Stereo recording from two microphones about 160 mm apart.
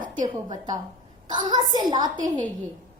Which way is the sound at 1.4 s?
25° right (ahead or behind).